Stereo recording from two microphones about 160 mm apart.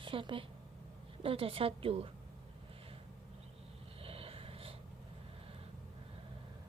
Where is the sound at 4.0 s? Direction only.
35° right (ahead or behind).